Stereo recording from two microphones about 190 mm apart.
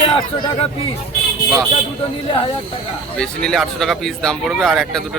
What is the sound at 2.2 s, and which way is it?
Speech, 30° left (ahead or behind).